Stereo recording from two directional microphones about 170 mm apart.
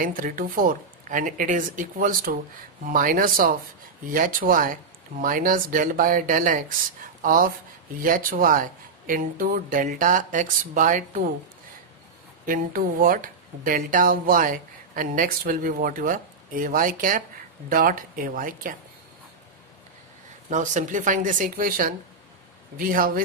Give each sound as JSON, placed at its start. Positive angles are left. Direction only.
{"t": 0.0, "sound": "speech", "side_deg": -55}
{"t": 12.4, "sound": "speech", "side_deg": -55}
{"t": 20.4, "sound": "speech", "side_deg": -45}